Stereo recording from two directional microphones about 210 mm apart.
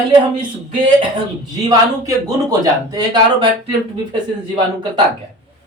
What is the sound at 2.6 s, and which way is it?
Speech, 20° right (ahead or behind).